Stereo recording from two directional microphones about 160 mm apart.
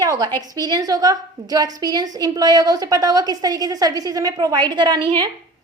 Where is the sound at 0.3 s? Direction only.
25° right (ahead or behind).